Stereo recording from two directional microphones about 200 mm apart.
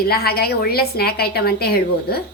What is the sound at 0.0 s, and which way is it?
A woman's voice, 50° left (ahead or behind).